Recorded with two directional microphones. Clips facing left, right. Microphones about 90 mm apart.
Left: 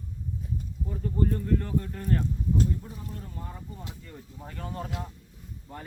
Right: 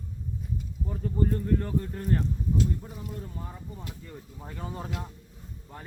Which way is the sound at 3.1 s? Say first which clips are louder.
Right 1 dB; 15° right (ahead or behind).